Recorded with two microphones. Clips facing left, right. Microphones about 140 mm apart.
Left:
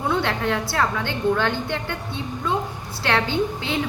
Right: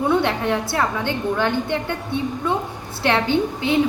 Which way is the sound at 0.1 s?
20° right (ahead or behind).